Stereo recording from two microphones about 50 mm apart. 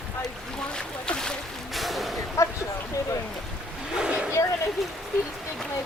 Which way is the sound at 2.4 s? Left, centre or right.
Left.